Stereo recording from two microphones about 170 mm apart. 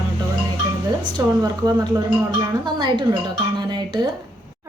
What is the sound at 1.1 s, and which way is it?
Speech, 20° right (ahead or behind).